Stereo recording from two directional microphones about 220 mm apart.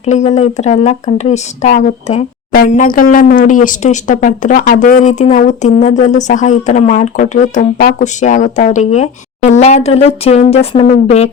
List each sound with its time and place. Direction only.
0.0 s speech: 30° left (ahead or behind)